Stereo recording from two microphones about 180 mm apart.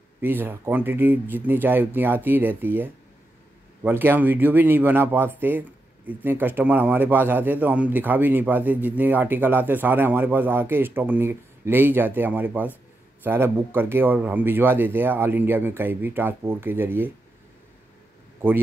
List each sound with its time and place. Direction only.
0.2 s speech: 10° right (ahead or behind)